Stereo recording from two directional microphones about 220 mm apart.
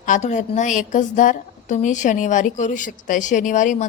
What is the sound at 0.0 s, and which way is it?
A woman's voice, 35° left (ahead or behind).